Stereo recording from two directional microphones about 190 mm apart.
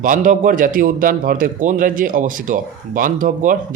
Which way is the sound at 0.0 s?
45° right (ahead or behind).